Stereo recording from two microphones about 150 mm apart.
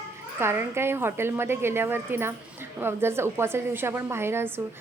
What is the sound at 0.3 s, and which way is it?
A woman's voice, 15° right (ahead or behind).